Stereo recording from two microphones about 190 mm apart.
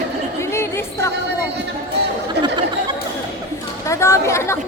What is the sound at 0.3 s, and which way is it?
Music, 15° left (ahead or behind).